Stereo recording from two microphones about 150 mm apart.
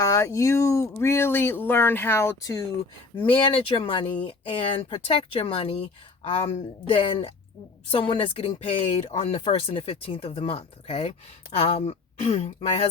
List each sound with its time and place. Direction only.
0.0 s speech: 20° left (ahead or behind)
3.2 s speech: 35° left (ahead or behind)